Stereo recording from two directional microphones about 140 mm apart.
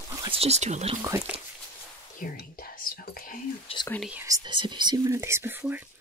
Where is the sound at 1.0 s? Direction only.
20° right (ahead or behind).